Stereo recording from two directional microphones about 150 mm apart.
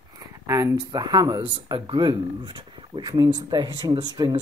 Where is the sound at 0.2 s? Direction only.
20° right (ahead or behind).